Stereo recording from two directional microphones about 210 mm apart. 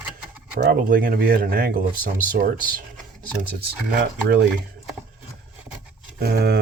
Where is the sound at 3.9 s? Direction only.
55° right (ahead or behind).